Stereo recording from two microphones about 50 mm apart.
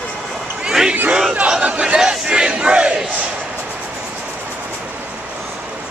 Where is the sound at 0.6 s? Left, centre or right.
Centre.